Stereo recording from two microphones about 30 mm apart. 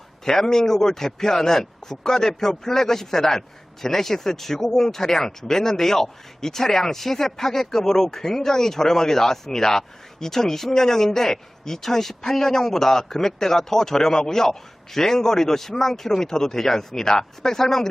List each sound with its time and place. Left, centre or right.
0.3 s speech: centre